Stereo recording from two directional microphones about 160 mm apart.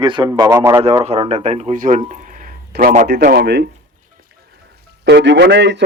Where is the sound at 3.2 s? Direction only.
85° right.